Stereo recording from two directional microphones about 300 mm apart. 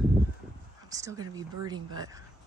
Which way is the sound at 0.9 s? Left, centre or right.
Centre.